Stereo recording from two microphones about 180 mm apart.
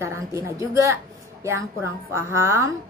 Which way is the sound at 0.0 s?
15° right (ahead or behind).